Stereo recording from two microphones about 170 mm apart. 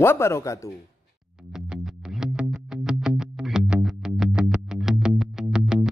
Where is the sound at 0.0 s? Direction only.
15° left (ahead or behind).